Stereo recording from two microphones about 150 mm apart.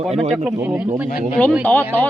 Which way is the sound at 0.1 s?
45° right (ahead or behind).